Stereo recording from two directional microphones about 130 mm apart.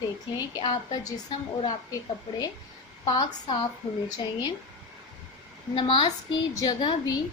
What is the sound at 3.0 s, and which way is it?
Speech, 35° left (ahead or behind).